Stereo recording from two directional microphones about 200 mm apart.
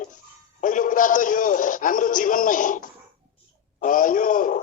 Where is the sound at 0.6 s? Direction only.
40° left (ahead or behind).